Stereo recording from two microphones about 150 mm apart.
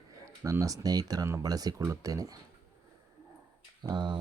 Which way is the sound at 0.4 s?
20° right (ahead or behind).